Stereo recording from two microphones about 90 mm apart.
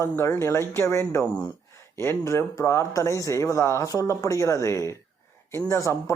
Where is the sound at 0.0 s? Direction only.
30° left (ahead or behind).